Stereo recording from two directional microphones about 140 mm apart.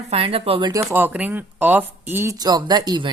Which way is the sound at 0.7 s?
20° right (ahead or behind).